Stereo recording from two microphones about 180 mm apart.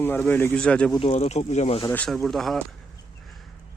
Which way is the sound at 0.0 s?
10° left (ahead or behind).